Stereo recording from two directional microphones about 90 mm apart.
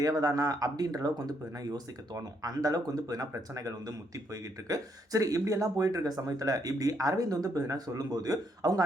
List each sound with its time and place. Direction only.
0.0 s speech: 45° right (ahead or behind)